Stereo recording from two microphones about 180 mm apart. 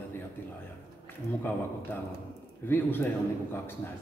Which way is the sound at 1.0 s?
10° left (ahead or behind).